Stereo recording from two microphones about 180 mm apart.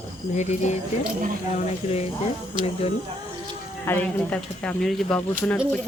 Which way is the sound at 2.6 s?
25° right (ahead or behind).